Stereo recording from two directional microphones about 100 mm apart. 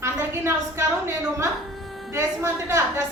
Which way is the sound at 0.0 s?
25° right (ahead or behind).